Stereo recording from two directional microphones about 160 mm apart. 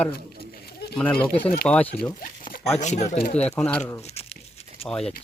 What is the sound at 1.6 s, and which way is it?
Speech, 10° left (ahead or behind).